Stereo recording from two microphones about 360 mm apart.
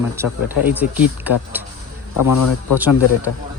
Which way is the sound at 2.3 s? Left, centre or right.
Left.